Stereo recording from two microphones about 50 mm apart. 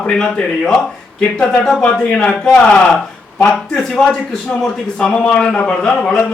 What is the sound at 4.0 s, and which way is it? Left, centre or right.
A man's voice, left.